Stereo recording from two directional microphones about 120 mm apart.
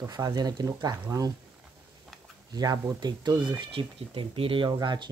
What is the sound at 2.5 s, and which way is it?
Speech, 35° right (ahead or behind).